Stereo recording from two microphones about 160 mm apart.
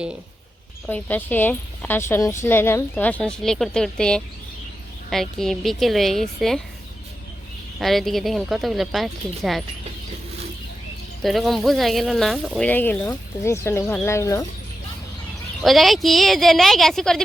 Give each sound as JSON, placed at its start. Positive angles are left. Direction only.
{"t": 0.9, "sound": "a woman's voice", "side_deg": 10}
{"t": 7.8, "sound": "speech", "side_deg": 0}
{"t": 11.2, "sound": "a woman's voice", "side_deg": 0}
{"t": 15.6, "sound": "speech", "side_deg": 0}